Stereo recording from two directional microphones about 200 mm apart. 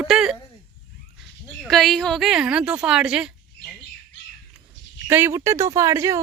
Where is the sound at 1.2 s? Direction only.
Centre (ahead or behind).